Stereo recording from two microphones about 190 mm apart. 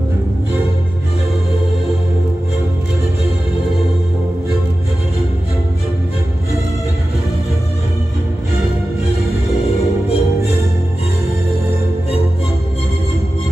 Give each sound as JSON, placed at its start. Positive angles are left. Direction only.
{"t": 10.0, "sound": "music", "side_deg": 30}